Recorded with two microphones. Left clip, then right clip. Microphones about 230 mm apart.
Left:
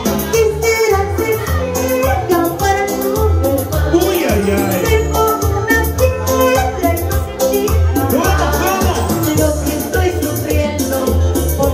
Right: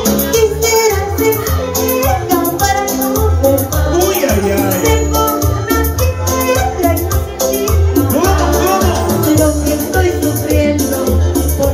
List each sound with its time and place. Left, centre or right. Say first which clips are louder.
0.0 s music: right 2 dB; centre
4.3 s music: right 1 dB; centre
7.4 s music: even; centre